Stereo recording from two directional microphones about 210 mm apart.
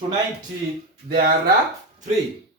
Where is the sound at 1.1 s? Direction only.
45° right (ahead or behind).